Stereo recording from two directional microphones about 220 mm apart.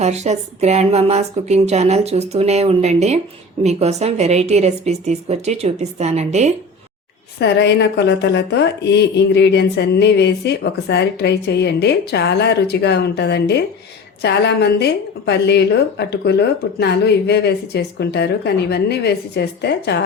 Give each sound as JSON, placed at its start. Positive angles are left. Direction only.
{"t": 0.0, "sound": "a woman's voice", "side_deg": -30}
{"t": 7.3, "sound": "speech", "side_deg": 50}